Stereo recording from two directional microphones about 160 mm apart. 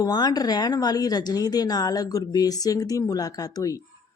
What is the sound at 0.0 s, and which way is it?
Speech, 25° left (ahead or behind).